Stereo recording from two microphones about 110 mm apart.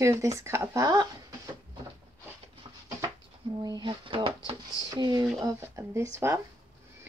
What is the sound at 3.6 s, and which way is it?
Speech, 40° right (ahead or behind).